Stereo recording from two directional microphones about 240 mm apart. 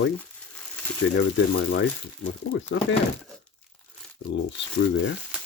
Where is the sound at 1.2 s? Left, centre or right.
Left.